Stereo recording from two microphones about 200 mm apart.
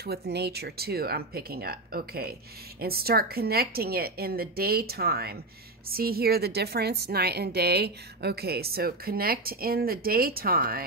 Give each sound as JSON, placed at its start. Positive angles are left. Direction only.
{"t": 0.0, "sound": "a woman's voice", "side_deg": -50}